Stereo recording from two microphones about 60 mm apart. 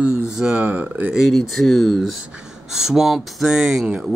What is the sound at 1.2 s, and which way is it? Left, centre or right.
Speech, centre.